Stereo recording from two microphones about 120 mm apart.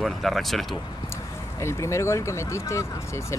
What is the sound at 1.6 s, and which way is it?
Speech, 25° left (ahead or behind).